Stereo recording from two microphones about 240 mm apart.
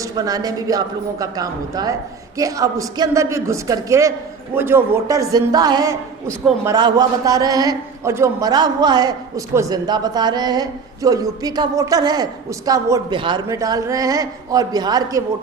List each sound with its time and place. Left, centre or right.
0.0 s a man's voice: centre